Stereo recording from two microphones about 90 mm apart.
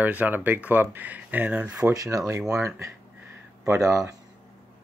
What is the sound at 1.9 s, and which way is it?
Speech, 40° right (ahead or behind).